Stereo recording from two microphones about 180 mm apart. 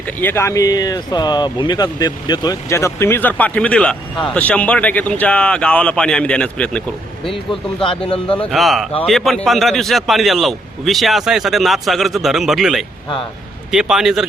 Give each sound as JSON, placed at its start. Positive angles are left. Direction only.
{"t": 0.2, "sound": "speech", "side_deg": 10}
{"t": 7.9, "sound": "speech", "side_deg": 30}
{"t": 8.3, "sound": "speech", "side_deg": 5}